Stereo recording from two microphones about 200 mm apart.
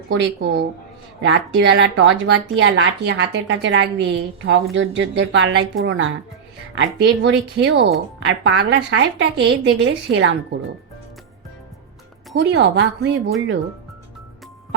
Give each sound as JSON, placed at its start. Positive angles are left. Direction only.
{"t": 0.1, "sound": "speech", "side_deg": -65}
{"t": 6.7, "sound": "speech", "side_deg": -60}
{"t": 12.3, "sound": "speech", "side_deg": -60}